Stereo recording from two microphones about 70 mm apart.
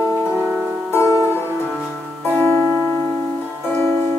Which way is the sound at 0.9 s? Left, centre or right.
Left.